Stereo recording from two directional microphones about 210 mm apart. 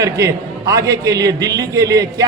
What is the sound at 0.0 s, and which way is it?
A man's voice, 15° right (ahead or behind).